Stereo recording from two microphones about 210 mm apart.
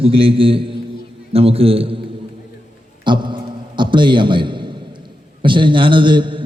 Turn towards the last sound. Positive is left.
turn(degrees=-20)  # may be behind; listen again after turning